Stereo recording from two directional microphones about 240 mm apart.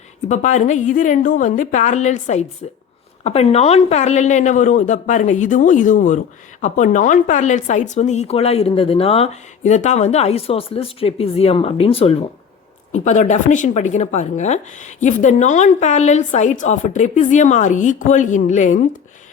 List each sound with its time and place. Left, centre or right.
0.3 s speech: left